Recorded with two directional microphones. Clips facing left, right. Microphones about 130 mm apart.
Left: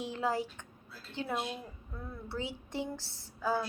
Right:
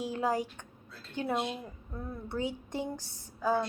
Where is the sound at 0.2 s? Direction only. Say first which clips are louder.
Right 2 dB; 15° right (ahead or behind).